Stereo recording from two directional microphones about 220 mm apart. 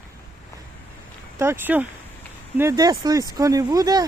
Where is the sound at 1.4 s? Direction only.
10° right (ahead or behind).